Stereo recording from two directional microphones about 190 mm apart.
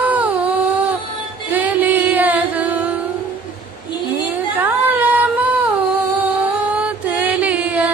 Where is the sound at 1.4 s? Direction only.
10° right (ahead or behind).